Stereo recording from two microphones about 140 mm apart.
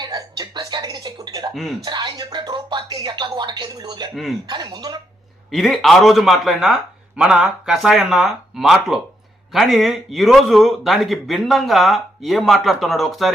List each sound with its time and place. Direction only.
0.0 s a sound: 30° right (ahead or behind)
4.1 s a man's voice: centre (ahead or behind)
4.4 s speech: 30° right (ahead or behind)
5.5 s a man's voice: centre (ahead or behind)